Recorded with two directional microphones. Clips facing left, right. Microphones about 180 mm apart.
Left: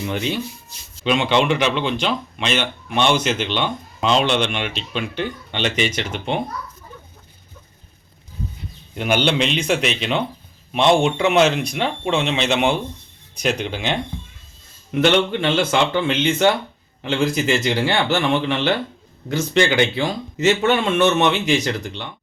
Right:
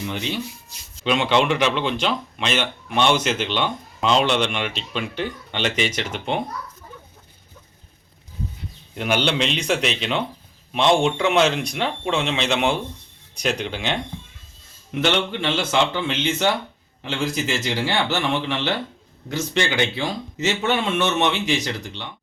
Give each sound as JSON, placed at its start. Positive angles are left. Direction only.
{"t": 1.0, "sound": "speech", "side_deg": 0}
{"t": 9.0, "sound": "speech", "side_deg": 0}
{"t": 15.0, "sound": "a man's voice", "side_deg": 55}